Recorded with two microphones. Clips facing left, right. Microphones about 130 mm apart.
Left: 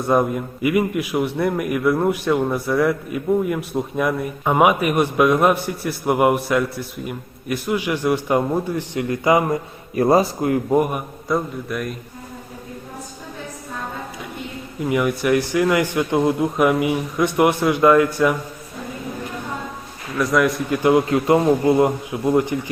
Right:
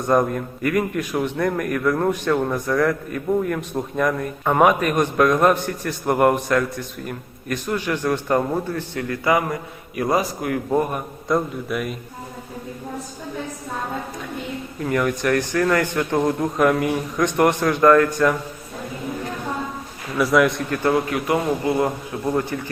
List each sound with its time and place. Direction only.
0.1 s a man's voice: 10° left (ahead or behind); by 10.6 s 25° left (ahead or behind)
10.7 s a man's voice: 10° left (ahead or behind)
11.3 s a man's voice: centre (ahead or behind)
14.8 s a man's voice: 10° left (ahead or behind)
20.1 s a man's voice: centre (ahead or behind)
20.7 s a man's voice: 15° left (ahead or behind)
21.1 s a man's voice: 25° left (ahead or behind)